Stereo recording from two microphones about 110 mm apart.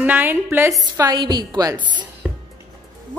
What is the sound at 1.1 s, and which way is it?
Speech, 40° right (ahead or behind).